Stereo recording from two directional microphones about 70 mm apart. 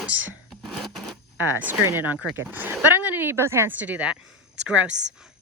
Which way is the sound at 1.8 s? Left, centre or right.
Right.